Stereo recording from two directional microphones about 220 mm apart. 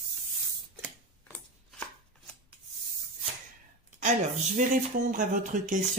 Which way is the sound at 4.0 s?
35° right (ahead or behind).